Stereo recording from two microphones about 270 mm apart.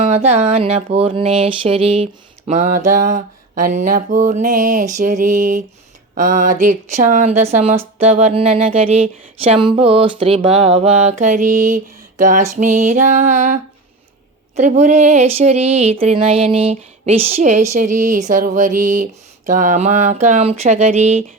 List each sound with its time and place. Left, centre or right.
0.0 s speech: right